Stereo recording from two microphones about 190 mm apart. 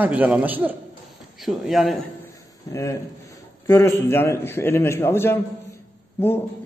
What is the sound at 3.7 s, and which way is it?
A man's voice, 10° left (ahead or behind).